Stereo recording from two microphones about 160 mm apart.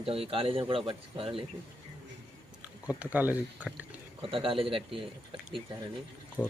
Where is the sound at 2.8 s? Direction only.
10° right (ahead or behind).